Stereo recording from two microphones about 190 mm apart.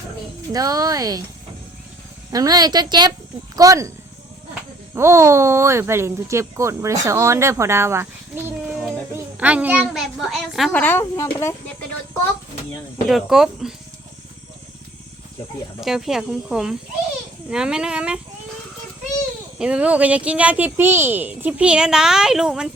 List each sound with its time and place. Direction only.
0.5 s speech: 20° right (ahead or behind)
2.3 s speech: 20° right (ahead or behind)
4.9 s speech: 15° right (ahead or behind)
9.1 s a child's voice: 10° right (ahead or behind); by 11.5 s 15° left (ahead or behind)
13.1 s a child's voice: centre (ahead or behind)
15.8 s a child's voice: centre (ahead or behind)
19.5 s speech: 5° right (ahead or behind)